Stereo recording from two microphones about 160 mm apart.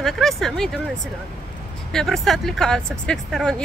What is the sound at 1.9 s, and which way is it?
Speech, centre (ahead or behind).